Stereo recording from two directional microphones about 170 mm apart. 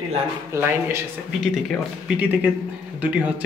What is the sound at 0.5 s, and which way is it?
Speech, 15° right (ahead or behind).